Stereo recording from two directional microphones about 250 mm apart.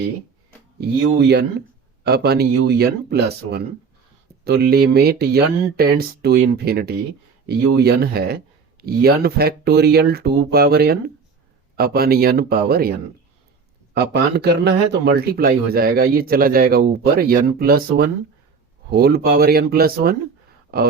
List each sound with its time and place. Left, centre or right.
0.8 s a man's voice: right
13.9 s a man's voice: right